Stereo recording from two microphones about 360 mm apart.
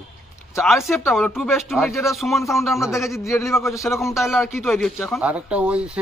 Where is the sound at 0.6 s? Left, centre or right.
Centre.